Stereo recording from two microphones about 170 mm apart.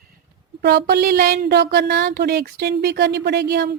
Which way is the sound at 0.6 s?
75° right (ahead or behind).